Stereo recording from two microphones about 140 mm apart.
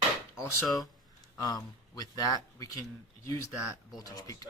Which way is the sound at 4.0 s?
25° left (ahead or behind).